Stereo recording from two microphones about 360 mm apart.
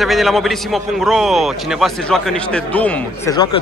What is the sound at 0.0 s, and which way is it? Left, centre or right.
A man's voice, centre.